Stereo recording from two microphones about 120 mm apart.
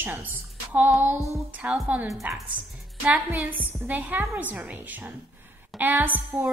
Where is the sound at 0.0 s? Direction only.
15° right (ahead or behind).